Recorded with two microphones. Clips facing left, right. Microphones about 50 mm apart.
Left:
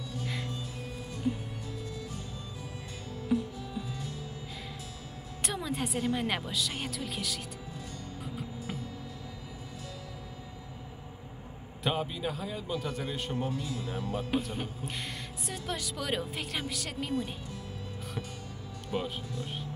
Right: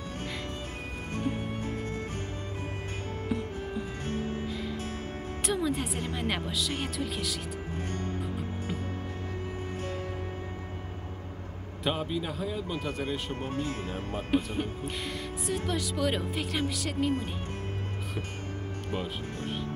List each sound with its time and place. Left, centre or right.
1.1 s music: right
3.3 s music: right
5.4 s speech: centre
11.8 s speech: centre
13.3 s speech: right
14.3 s speech: centre